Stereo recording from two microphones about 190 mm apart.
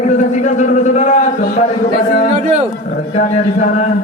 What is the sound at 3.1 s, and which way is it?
Speech, 40° left (ahead or behind).